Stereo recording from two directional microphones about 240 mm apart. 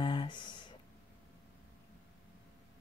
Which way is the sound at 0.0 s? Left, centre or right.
Centre.